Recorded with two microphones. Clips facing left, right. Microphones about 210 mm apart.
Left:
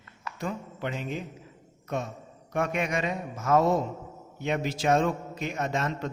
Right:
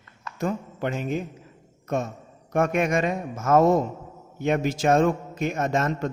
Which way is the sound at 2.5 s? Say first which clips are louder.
Right 6 dB; 50° right (ahead or behind).